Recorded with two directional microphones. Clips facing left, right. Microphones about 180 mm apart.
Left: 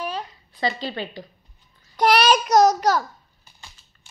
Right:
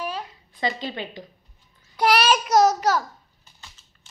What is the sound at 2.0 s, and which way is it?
Child singing, 5° right (ahead or behind).